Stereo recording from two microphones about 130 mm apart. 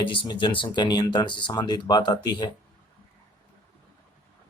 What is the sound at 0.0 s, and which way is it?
Speech, 40° left (ahead or behind).